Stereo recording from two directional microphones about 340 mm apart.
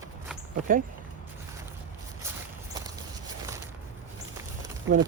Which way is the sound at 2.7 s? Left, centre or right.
Centre.